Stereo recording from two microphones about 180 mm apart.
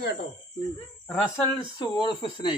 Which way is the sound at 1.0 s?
15° left (ahead or behind).